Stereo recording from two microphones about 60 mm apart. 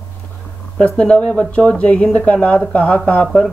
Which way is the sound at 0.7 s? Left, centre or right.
Centre.